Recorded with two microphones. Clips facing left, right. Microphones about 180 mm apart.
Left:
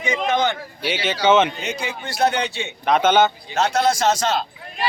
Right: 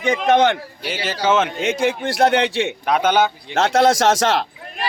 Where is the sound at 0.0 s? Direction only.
65° right (ahead or behind).